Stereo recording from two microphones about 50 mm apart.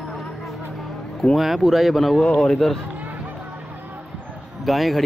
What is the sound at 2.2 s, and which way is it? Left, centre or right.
Speech, centre.